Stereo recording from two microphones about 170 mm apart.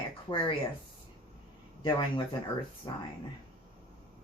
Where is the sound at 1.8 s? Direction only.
30° left (ahead or behind).